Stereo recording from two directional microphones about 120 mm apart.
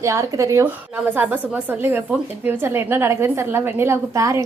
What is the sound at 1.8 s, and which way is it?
A woman's voice, 15° right (ahead or behind).